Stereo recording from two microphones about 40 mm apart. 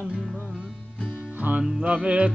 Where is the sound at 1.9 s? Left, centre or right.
Right.